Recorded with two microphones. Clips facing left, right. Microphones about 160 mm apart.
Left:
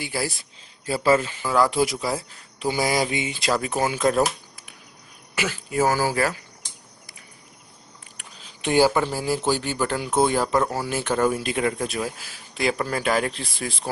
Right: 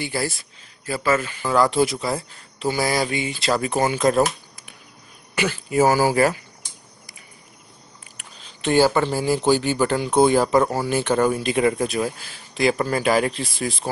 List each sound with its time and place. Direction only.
0.0 s speech: 5° left (ahead or behind)
0.8 s a man's voice: 30° left (ahead or behind)
1.4 s speech: 5° left (ahead or behind)
3.5 s speech: centre (ahead or behind)
5.3 s a sound: centre (ahead or behind)
5.8 s speech: 15° right (ahead or behind)
8.5 s speech: 15° left (ahead or behind)